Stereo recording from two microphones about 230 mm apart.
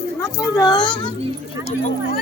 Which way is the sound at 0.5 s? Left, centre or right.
Centre.